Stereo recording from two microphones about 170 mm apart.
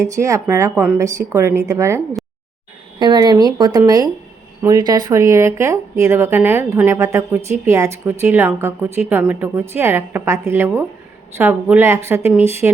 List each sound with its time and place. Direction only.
0.0 s a woman's voice: 20° right (ahead or behind)
3.0 s a woman's voice: 25° right (ahead or behind)